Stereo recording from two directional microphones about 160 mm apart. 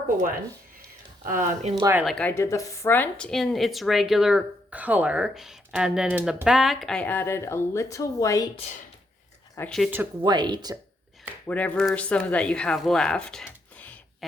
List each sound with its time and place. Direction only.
1.2 s speech: 55° right (ahead or behind)
1.8 s speech: 15° right (ahead or behind)
2.0 s speech: 5° left (ahead or behind)
2.3 s a woman's voice: 15° left (ahead or behind)
9.6 s a woman's voice: 5° left (ahead or behind)
10.2 s speech: 30° right (ahead or behind)
11.4 s speech: 10° left (ahead or behind)